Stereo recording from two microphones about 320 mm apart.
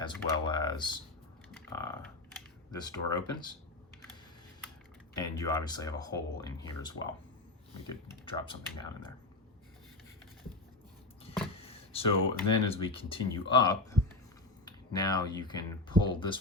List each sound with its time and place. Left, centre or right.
0.0 s speech: centre
5.1 s speech: centre
11.5 s speech: centre